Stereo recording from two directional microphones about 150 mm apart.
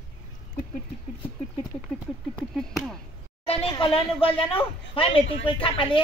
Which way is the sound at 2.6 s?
Centre (ahead or behind).